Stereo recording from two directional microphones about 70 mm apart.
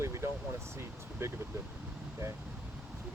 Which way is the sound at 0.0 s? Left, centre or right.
Right.